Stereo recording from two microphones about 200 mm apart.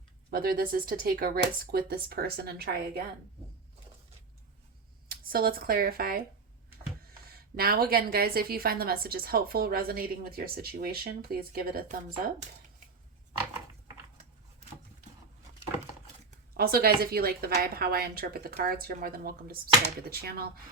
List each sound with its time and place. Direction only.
0.3 s a woman's voice: 45° right (ahead or behind)
5.0 s speech: 45° right (ahead or behind)
7.3 s a woman's voice: 50° right (ahead or behind)
16.6 s a woman's voice: 50° right (ahead or behind)